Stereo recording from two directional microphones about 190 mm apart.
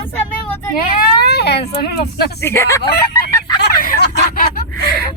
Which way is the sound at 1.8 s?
55° left (ahead or behind).